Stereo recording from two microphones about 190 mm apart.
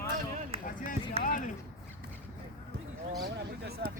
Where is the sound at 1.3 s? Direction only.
45° left (ahead or behind).